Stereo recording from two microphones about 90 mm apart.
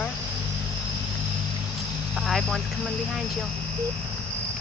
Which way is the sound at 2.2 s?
Centre (ahead or behind).